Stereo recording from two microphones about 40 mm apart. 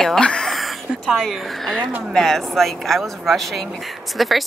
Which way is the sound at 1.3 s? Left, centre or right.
Centre.